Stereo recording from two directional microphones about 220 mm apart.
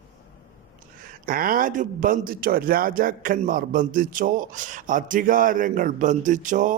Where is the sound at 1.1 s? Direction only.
40° right (ahead or behind).